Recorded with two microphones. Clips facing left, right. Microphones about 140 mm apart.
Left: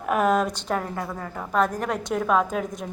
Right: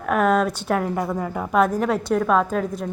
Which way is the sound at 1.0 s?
20° right (ahead or behind).